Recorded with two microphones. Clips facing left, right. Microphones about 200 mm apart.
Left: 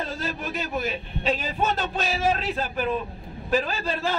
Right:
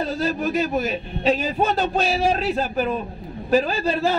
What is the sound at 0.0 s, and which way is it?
A man's voice, 40° right (ahead or behind).